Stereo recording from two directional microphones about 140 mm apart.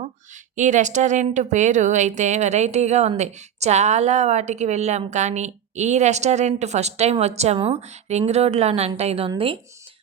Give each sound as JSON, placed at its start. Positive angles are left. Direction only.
{"t": 0.5, "sound": "a woman's voice", "side_deg": -60}